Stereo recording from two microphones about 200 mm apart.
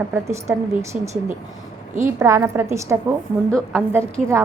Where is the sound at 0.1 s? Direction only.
15° right (ahead or behind).